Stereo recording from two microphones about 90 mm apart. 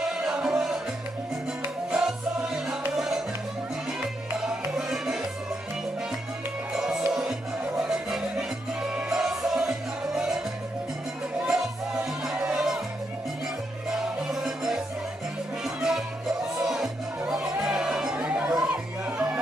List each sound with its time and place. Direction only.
0.1 s music: 5° right (ahead or behind)
1.9 s music: 5° right (ahead or behind)
6.7 s music: 5° right (ahead or behind)
11.4 s music: 5° right (ahead or behind)
14.2 s music: 5° right (ahead or behind)
17.2 s chatter: 5° right (ahead or behind)
18.6 s music: 20° right (ahead or behind)